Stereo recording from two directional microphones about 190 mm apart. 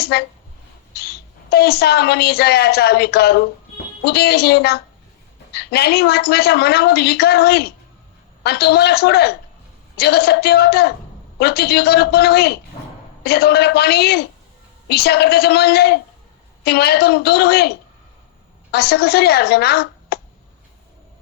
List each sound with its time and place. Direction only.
0.0 s a woman's voice: 60° left (ahead or behind)
18.7 s a woman's voice: 55° left (ahead or behind)